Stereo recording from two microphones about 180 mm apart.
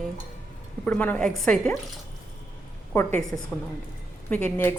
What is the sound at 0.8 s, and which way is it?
Speech, 10° left (ahead or behind).